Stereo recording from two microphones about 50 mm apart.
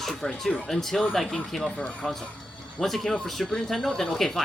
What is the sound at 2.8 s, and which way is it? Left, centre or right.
Speech, centre.